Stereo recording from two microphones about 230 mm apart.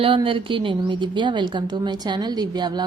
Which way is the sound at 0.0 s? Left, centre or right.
Right.